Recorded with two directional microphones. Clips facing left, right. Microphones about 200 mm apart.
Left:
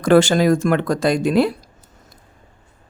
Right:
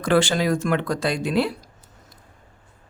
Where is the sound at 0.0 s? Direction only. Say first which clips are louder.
Left 6 dB; 45° left (ahead or behind).